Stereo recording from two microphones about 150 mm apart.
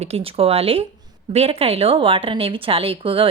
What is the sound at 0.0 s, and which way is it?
A woman's voice, 40° right (ahead or behind).